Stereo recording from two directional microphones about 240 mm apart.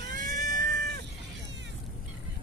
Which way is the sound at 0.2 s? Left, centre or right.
Right.